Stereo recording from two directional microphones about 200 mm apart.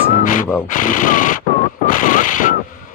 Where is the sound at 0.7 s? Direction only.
40° left (ahead or behind).